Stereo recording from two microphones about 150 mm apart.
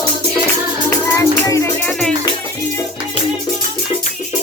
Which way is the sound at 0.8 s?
20° left (ahead or behind).